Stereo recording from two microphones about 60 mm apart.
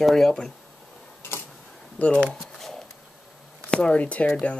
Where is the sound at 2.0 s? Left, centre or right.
Centre.